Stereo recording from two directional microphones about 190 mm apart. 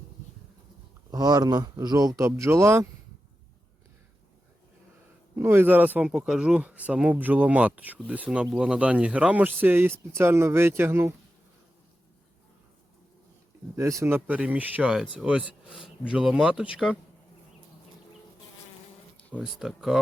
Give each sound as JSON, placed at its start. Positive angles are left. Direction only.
{"t": 1.1, "sound": "speech", "side_deg": -20}
{"t": 5.4, "sound": "speech", "side_deg": -15}
{"t": 13.7, "sound": "speech", "side_deg": -15}
{"t": 19.3, "sound": "speech", "side_deg": -5}